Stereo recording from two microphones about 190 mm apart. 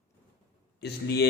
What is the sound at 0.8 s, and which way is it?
Speech, 60° left (ahead or behind).